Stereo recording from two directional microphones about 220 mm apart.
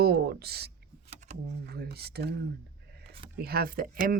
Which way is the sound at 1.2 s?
30° right (ahead or behind).